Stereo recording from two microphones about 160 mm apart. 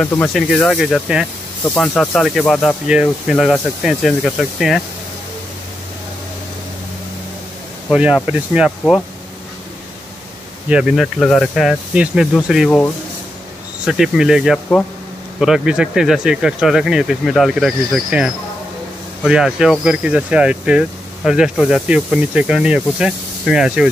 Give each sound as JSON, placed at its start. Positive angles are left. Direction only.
{"t": 0.0, "sound": "speech", "side_deg": 5}
{"t": 7.9, "sound": "speech", "side_deg": -5}
{"t": 10.7, "sound": "speech", "side_deg": -5}